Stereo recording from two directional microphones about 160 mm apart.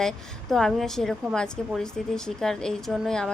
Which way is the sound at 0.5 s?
Centre (ahead or behind).